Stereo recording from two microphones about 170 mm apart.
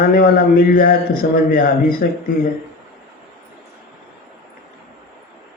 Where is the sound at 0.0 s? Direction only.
60° left (ahead or behind).